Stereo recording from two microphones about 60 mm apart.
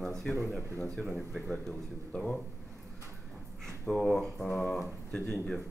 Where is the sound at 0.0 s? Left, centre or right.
Centre.